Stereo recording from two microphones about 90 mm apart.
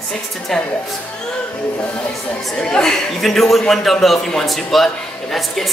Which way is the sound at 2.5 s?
5° left (ahead or behind).